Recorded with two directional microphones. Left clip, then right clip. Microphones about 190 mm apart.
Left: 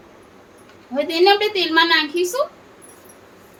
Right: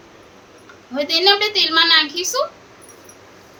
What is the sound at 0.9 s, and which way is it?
A woman's voice, 40° left (ahead or behind).